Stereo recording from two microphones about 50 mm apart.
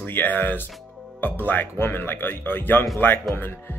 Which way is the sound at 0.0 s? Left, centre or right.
Left.